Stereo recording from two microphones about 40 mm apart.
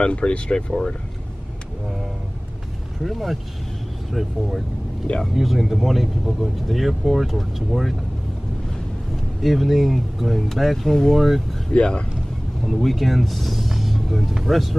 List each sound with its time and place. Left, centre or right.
0.0 s speech: left
3.0 s speech: centre
5.3 s speech: centre
9.4 s speech: centre
11.7 s speech: left
12.6 s speech: centre